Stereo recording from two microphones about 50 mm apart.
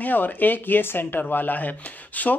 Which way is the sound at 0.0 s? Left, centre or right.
Left.